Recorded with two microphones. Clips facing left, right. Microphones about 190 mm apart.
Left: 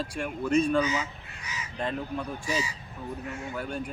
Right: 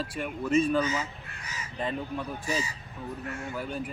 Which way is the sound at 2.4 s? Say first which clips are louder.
Left 1 dB; 40° right (ahead or behind).